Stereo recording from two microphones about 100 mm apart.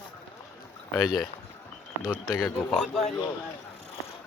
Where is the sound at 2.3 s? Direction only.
30° left (ahead or behind).